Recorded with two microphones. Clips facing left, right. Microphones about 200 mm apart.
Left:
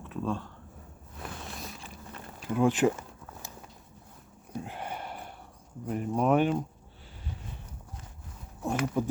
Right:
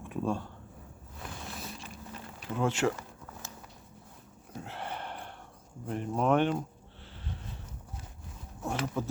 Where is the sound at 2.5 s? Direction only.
15° left (ahead or behind).